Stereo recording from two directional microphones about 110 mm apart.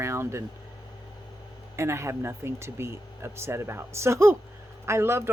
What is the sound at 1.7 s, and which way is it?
Speech, 25° right (ahead or behind).